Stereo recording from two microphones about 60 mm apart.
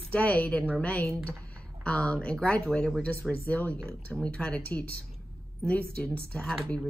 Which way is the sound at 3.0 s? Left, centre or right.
Left.